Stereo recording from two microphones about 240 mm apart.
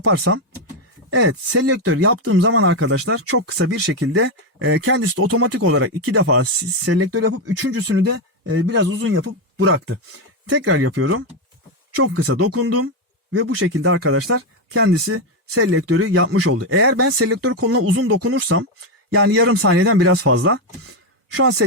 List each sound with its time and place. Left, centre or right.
0.0 s speech: right
9.6 s speech: right
10.5 s speech: right